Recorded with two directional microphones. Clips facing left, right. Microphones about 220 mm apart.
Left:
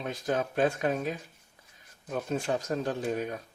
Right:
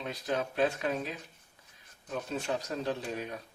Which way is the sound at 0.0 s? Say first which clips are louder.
Left 3 dB; 50° left (ahead or behind).